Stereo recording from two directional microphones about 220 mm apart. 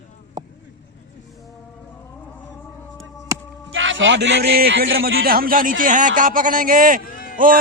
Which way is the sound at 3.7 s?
60° right (ahead or behind).